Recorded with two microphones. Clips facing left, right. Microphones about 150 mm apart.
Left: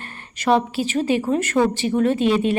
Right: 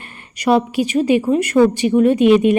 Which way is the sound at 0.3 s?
15° right (ahead or behind).